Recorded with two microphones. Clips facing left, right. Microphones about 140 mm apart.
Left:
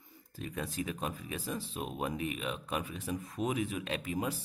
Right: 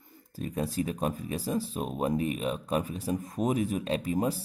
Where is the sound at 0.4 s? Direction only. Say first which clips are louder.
Right 7 dB; 35° right (ahead or behind).